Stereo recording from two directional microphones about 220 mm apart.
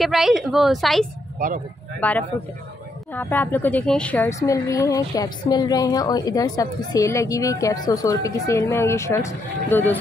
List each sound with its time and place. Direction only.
0.0 s a woman's voice: centre (ahead or behind)
1.4 s speech: 40° right (ahead or behind)
2.0 s a woman's voice: 5° left (ahead or behind)